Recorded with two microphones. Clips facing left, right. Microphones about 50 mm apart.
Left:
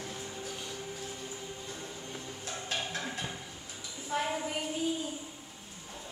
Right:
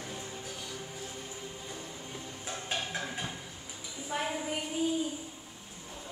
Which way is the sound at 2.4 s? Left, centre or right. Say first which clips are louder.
Right 1 dB; centre.